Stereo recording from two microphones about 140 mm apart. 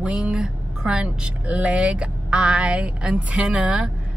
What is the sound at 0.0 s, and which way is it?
Speech, 5° right (ahead or behind).